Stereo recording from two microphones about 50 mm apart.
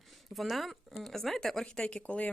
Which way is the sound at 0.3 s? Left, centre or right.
Centre.